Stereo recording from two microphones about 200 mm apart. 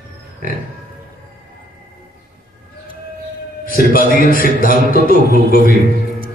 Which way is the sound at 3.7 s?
45° left (ahead or behind).